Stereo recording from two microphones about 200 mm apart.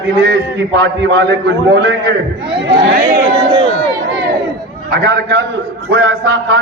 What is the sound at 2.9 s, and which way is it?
Speech, 45° right (ahead or behind).